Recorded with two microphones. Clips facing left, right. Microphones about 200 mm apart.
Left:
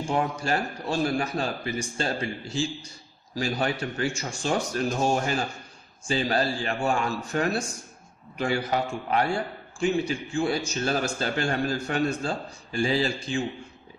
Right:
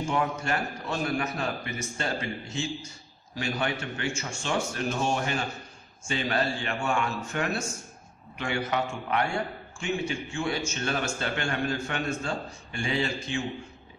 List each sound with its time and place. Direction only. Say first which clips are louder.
0.0 s a man's voice: left 1 dB; 35° left (ahead or behind)